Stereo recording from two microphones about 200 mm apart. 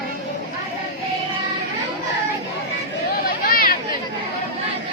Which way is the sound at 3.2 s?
45° left (ahead or behind).